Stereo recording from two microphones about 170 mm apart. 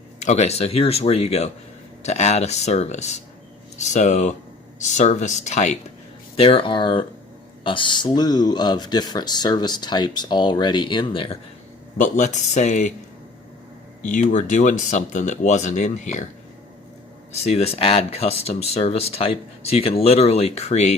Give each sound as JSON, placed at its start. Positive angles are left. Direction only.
{"t": 0.3, "sound": "speech", "side_deg": 40}
{"t": 6.3, "sound": "speech", "side_deg": 35}
{"t": 11.9, "sound": "speech", "side_deg": 45}
{"t": 14.0, "sound": "speech", "side_deg": 50}
{"t": 17.4, "sound": "speech", "side_deg": 35}